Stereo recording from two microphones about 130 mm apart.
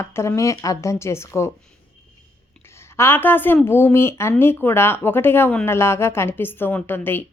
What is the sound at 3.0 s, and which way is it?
A woman's voice, 15° left (ahead or behind).